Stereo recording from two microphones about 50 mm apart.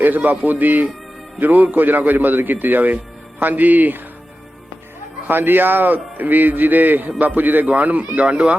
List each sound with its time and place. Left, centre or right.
0.0 s a man's voice: right
5.3 s a man's voice: right